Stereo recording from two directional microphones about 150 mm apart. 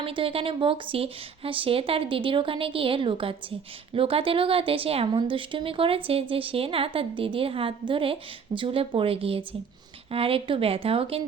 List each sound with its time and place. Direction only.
0.0 s speech: 40° right (ahead or behind)